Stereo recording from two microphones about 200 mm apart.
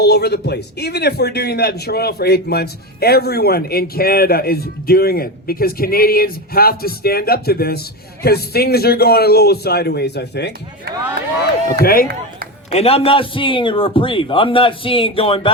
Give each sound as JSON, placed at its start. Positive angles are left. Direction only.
{"t": 0.0, "sound": "a man's voice", "side_deg": 55}
{"t": 11.8, "sound": "a man's voice", "side_deg": 45}
{"t": 12.7, "sound": "a man's voice", "side_deg": 30}